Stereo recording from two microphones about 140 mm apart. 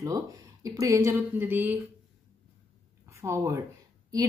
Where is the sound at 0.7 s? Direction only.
25° right (ahead or behind).